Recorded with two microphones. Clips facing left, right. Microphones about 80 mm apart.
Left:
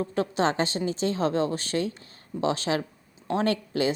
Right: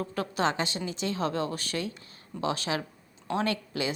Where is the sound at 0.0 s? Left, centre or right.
Left.